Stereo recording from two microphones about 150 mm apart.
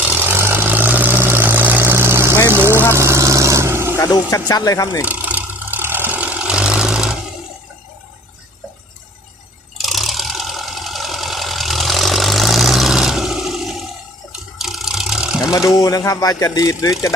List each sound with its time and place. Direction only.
0.0 s vehicle: 10° right (ahead or behind)
3.9 s speech: 20° left (ahead or behind)
5.0 s vehicle: 10° right (ahead or behind)
9.7 s engine: centre (ahead or behind)
14.6 s a sound: 5° right (ahead or behind)
15.5 s speech: 20° left (ahead or behind)